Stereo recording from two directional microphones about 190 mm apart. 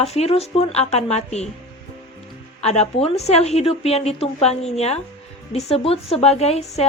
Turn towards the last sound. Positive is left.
turn(degrees=35)  # may be behind; listen again after turning